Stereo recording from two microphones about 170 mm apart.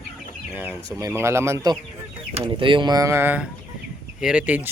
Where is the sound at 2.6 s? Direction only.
30° right (ahead or behind).